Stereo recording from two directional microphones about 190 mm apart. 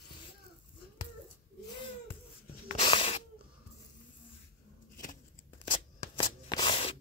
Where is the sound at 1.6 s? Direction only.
25° left (ahead or behind).